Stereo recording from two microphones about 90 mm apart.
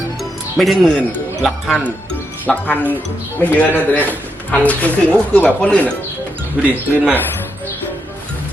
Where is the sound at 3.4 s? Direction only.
20° left (ahead or behind).